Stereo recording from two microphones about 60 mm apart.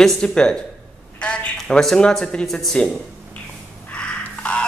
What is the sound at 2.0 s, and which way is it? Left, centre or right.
Speech, centre.